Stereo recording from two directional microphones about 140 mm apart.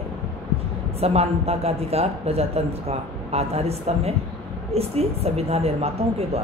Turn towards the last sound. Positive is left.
turn(degrees=-45)  # may be behind; listen again after turning